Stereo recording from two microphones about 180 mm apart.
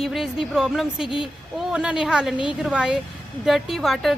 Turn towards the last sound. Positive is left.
turn(degrees=0)  # may be behind; listen again after turning